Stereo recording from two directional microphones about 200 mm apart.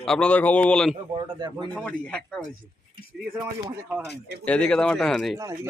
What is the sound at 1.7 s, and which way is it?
Speech, 5° left (ahead or behind).